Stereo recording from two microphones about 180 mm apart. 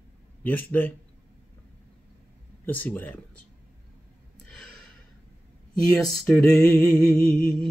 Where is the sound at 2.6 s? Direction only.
10° left (ahead or behind).